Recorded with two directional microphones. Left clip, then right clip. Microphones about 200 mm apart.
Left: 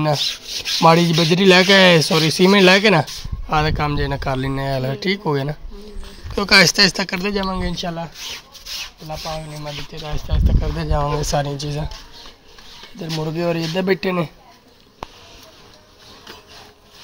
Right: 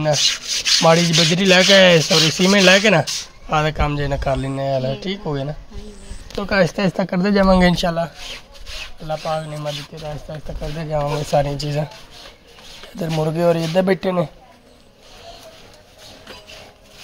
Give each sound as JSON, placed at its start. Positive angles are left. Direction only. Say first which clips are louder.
{"t": 0.0, "sound": "speech", "louder": "right 3 dB", "side_deg": 15}
{"t": 4.5, "sound": "speech", "louder": "right 2 dB", "side_deg": 20}
{"t": 6.3, "sound": "speech", "louder": "left 5 dB", "side_deg": 15}
{"t": 6.7, "sound": "speech", "louder": "left 5 dB", "side_deg": -5}
{"t": 8.6, "sound": "rub", "louder": "left 3 dB", "side_deg": 50}
{"t": 9.0, "sound": "speech", "louder": "right 10 dB", "side_deg": -15}
{"t": 10.0, "sound": "speech", "louder": "left 1 dB", "side_deg": 10}
{"t": 11.4, "sound": "speech", "louder": "right 3 dB", "side_deg": -10}
{"t": 13.1, "sound": "speech", "louder": "right 4 dB", "side_deg": -10}